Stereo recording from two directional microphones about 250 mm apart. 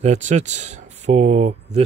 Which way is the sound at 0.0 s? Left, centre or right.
Right.